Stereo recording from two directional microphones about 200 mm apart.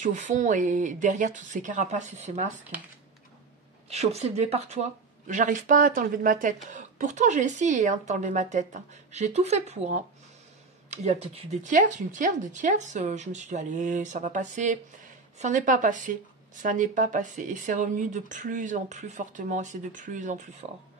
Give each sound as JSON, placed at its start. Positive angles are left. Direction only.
{"t": 0.0, "sound": "speech", "side_deg": -40}
{"t": 3.9, "sound": "speech", "side_deg": -30}